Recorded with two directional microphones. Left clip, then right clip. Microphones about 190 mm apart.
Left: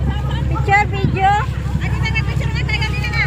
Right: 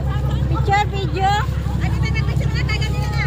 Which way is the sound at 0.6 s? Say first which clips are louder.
Left 4 dB; 35° left (ahead or behind).